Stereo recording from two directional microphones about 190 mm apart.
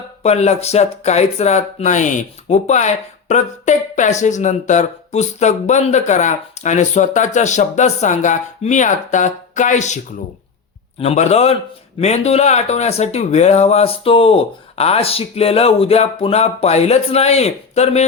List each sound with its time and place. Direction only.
0.2 s speech: 35° left (ahead or behind)
11.0 s speech: 35° left (ahead or behind)